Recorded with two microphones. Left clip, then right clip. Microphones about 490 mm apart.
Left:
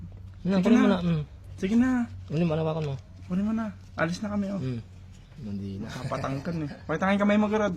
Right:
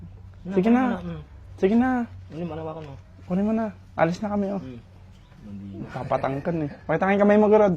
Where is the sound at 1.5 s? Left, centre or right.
Centre.